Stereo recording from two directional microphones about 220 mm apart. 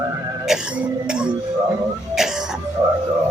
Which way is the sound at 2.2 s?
Centre (ahead or behind).